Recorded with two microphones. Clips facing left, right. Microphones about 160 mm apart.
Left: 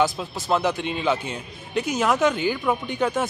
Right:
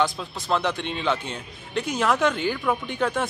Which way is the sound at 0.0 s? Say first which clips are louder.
Left 2 dB; 5° left (ahead or behind).